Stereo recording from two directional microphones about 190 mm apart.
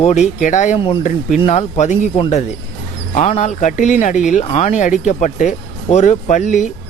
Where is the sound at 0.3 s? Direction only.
40° left (ahead or behind).